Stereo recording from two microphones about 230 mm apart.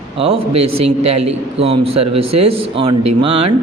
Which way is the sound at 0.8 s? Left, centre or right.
Right.